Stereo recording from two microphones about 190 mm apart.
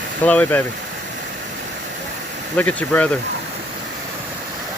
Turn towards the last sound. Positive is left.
turn(degrees=5)  # may be behind; listen again after turning